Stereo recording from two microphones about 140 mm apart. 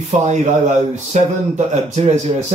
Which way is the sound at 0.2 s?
55° right (ahead or behind).